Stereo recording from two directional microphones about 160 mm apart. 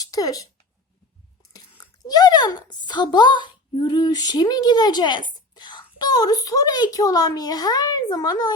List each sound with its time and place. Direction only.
0.0 s speech: 25° left (ahead or behind)
1.8 s speech: 25° left (ahead or behind)